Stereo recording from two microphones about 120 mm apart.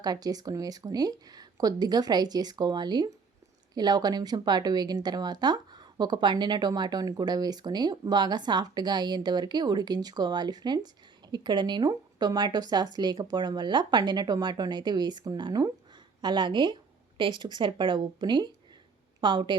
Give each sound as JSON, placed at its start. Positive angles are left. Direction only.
{"t": 0.0, "sound": "speech", "side_deg": -35}